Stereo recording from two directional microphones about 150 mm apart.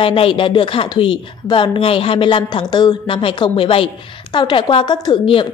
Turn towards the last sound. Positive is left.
turn(degrees=30)  # may be behind; listen again after turning